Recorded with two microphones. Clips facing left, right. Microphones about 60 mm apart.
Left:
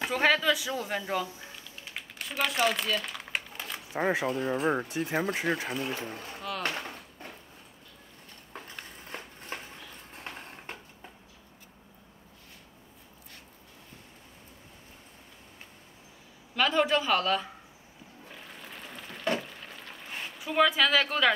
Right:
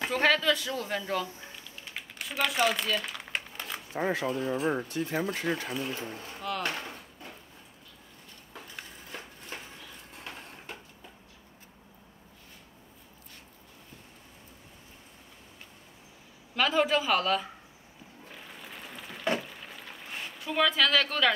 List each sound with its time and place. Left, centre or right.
0.0 s a man's voice: centre
1.9 s typing: centre
3.9 s speech: centre
4.3 s speech: left
5.8 s speech: left
6.6 s a sound: left
9.5 s a sound: left
16.5 s speech: centre
18.3 s a sound: centre